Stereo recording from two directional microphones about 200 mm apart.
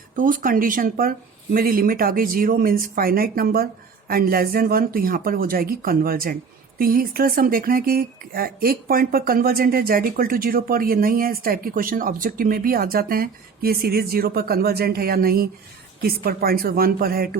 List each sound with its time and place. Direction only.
0.2 s speech: 45° right (ahead or behind)